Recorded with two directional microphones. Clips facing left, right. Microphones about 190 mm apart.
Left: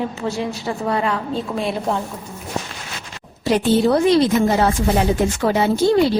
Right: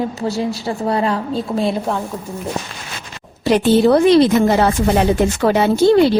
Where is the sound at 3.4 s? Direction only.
70° right (ahead or behind).